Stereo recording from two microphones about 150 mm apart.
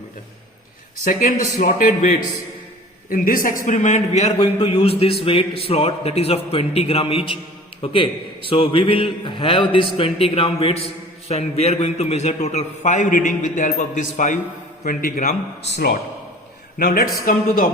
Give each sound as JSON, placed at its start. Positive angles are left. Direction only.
{"t": 1.0, "sound": "a man's voice", "side_deg": 60}
{"t": 14.8, "sound": "a man's voice", "side_deg": 70}
{"t": 16.7, "sound": "a man's voice", "side_deg": 75}